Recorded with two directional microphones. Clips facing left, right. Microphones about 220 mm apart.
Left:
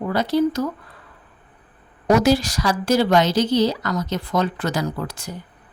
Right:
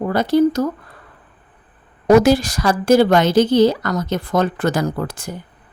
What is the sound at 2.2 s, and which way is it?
Speech, 50° right (ahead or behind).